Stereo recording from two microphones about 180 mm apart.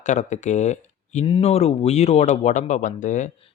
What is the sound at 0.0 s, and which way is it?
Speech, 40° left (ahead or behind).